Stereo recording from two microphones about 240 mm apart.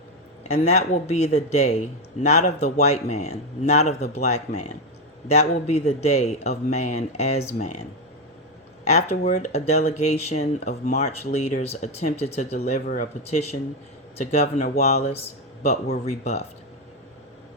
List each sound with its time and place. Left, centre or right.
0.6 s speech: left
8.9 s speech: left